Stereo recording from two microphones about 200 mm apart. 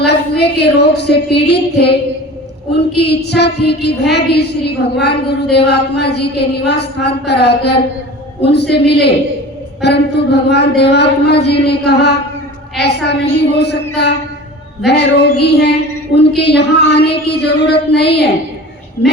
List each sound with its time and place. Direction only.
0.0 s a woman's voice: 55° left (ahead or behind)